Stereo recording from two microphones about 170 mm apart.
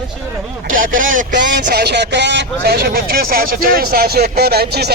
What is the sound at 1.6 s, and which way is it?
Speech, 75° right (ahead or behind).